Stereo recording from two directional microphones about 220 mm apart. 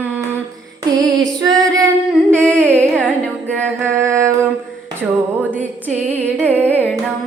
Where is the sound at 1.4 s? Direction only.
15° right (ahead or behind).